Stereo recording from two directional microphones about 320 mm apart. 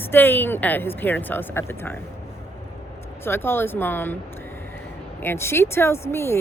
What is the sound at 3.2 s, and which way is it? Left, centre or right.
Speech, centre.